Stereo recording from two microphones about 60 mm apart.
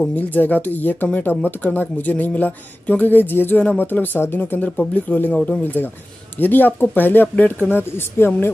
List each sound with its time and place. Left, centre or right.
0.1 s speech: left
4.6 s speech: left